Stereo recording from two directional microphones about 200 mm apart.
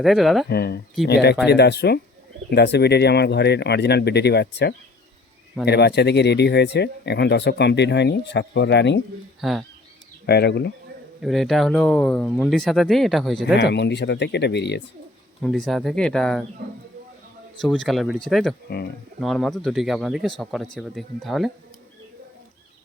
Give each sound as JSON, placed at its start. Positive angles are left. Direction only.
{"t": 0.0, "sound": "speech", "side_deg": 0}
{"t": 0.4, "sound": "speech", "side_deg": 55}
{"t": 9.4, "sound": "speech", "side_deg": 0}
{"t": 10.2, "sound": "speech", "side_deg": 55}
{"t": 11.2, "sound": "speech", "side_deg": 0}
{"t": 13.6, "sound": "speech", "side_deg": 60}
{"t": 15.4, "sound": "speech", "side_deg": 0}
{"t": 17.6, "sound": "speech", "side_deg": 0}